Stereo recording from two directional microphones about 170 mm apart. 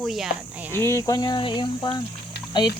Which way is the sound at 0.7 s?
15° left (ahead or behind).